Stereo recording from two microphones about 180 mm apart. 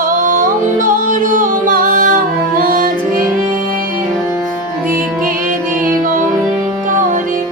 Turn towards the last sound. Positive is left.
turn(degrees=-45)  # may be behind; listen again after turning